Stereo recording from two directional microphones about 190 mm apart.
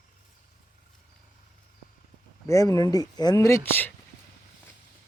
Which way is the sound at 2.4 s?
15° left (ahead or behind).